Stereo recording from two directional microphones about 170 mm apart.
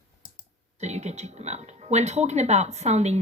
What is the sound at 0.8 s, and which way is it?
Speech, 40° right (ahead or behind).